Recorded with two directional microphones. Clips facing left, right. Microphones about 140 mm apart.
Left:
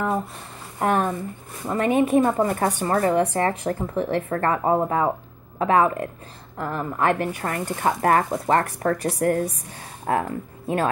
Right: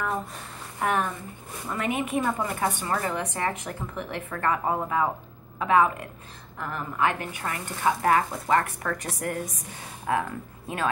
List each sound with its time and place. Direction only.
0.7 s speech: 30° left (ahead or behind)